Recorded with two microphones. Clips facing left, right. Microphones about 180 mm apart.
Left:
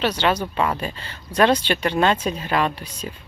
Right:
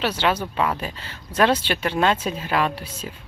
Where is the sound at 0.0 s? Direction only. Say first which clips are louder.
Left 2 dB; 10° right (ahead or behind).